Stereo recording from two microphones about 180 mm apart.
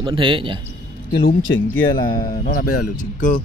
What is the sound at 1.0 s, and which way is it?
Speech, 90° left.